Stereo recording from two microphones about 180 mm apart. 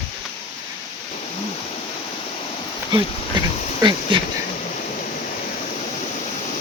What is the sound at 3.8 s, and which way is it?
Speech, 25° right (ahead or behind).